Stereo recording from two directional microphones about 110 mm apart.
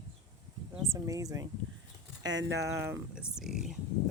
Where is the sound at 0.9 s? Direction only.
30° right (ahead or behind).